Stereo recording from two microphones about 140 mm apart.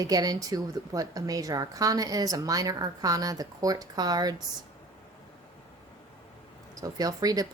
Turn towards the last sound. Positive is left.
turn(degrees=-25)  # may be behind; listen again after turning